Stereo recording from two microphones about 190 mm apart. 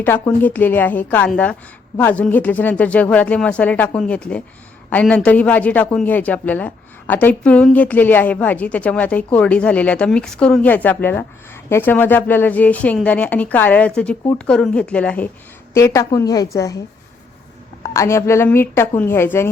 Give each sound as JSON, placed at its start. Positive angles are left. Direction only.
{"t": 0.0, "sound": "a man's voice", "side_deg": 10}
{"t": 17.8, "sound": "a man's voice", "side_deg": 15}